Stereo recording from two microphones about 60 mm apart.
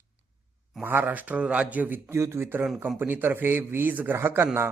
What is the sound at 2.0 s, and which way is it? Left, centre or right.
Speech, right.